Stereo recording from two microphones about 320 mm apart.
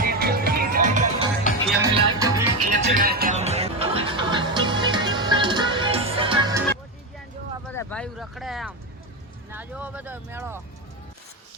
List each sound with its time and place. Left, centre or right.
0.0 s music: right
1.8 s music: centre
2.6 s music: right
7.6 s a sound: centre
9.5 s speech: centre